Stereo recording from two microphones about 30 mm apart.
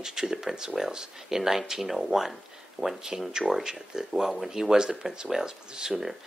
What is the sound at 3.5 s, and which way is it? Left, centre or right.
Speech, centre.